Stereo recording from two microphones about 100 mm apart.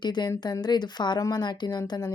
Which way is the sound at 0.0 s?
45° left (ahead or behind).